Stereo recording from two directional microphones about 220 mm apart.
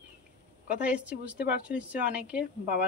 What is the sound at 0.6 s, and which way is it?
A woman's voice, 5° right (ahead or behind).